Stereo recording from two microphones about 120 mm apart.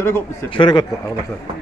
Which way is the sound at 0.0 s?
20° left (ahead or behind).